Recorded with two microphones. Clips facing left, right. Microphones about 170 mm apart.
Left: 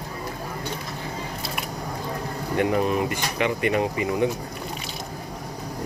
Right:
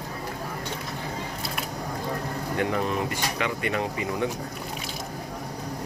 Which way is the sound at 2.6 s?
15° left (ahead or behind).